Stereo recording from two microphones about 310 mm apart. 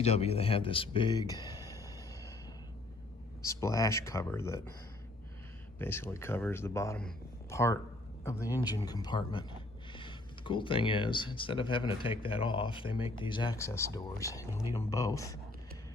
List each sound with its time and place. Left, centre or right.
0.0 s speech: centre
3.4 s speech: centre
5.8 s speech: centre